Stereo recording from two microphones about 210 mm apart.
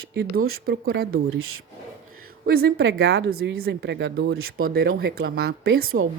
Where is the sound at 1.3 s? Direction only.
90° right.